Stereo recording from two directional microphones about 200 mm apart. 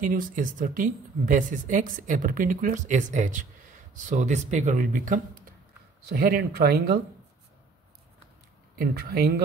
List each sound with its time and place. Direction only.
0.0 s speech: 40° right (ahead or behind)
8.7 s speech: 50° right (ahead or behind)